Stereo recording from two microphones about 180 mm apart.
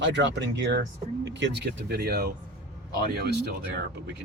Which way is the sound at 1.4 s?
60° right (ahead or behind).